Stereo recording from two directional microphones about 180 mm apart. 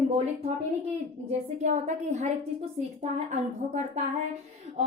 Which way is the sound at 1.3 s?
40° right (ahead or behind).